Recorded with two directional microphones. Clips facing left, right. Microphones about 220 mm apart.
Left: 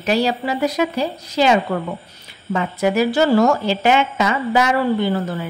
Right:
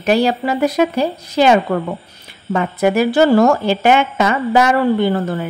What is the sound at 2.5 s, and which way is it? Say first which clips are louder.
A woman's voice: right 3 dB; 55° right (ahead or behind).